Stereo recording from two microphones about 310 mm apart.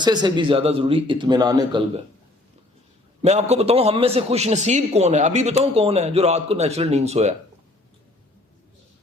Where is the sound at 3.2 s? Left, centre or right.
Right.